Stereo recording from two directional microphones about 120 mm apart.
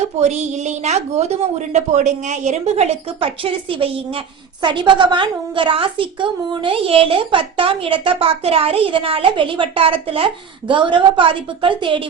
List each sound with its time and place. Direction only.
0.0 s a woman's voice: 65° right (ahead or behind)
3.2 s a woman's voice: 50° right (ahead or behind)